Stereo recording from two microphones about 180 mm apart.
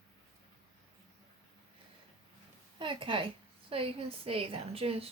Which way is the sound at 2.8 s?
30° right (ahead or behind).